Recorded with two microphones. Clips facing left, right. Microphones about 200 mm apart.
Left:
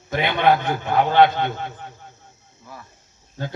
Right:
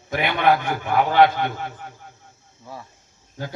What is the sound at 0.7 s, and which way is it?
Speech, 25° left (ahead or behind).